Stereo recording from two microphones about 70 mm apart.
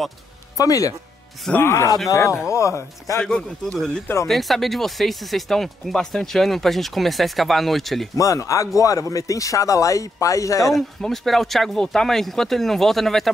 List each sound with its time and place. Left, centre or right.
0.6 s speech: left
1.6 s a man's voice: left
3.2 s speech: centre
8.2 s speech: left
10.6 s speech: centre